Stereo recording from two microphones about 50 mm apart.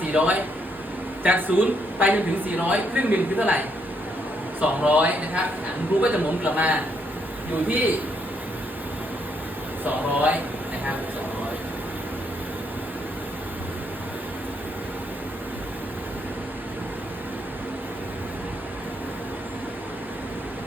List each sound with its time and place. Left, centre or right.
0.1 s a man's voice: right
4.9 s a woman's voice: right
9.8 s a woman's voice: right